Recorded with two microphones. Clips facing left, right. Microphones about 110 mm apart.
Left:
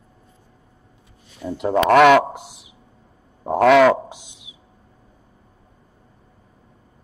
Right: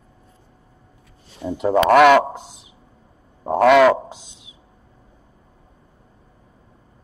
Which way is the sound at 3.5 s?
Centre (ahead or behind).